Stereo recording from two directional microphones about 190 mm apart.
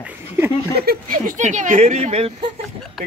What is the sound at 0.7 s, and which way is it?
Speech, 50° right (ahead or behind).